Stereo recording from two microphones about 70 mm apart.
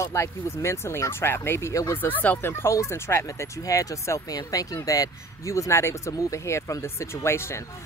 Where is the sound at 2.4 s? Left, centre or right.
Left.